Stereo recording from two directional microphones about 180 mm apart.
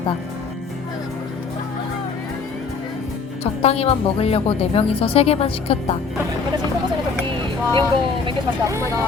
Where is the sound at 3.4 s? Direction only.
35° left (ahead or behind).